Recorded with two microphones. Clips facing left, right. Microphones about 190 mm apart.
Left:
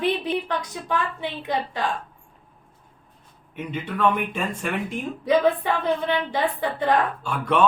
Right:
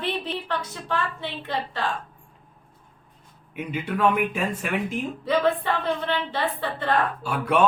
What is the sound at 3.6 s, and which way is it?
Speech, 10° right (ahead or behind).